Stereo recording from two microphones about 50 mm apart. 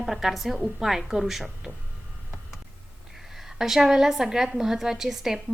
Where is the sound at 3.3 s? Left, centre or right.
Centre.